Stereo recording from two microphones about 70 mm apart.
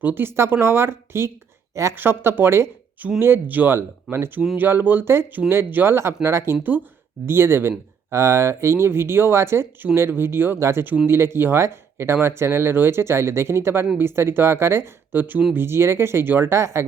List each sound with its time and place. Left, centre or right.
0.0 s speech: right
2.0 s speech: right
8.1 s speech: right